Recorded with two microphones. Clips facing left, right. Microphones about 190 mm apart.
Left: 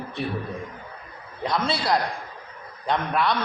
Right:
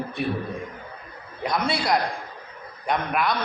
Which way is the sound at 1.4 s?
15° right (ahead or behind).